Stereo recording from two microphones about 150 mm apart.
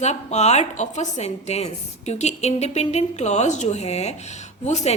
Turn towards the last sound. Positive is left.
turn(degrees=50)  # may be behind; listen again after turning